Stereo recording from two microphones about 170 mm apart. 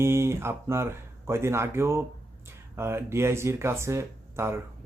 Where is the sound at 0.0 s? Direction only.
15° right (ahead or behind).